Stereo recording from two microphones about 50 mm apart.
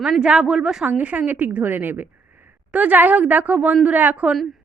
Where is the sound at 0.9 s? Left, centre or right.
Right.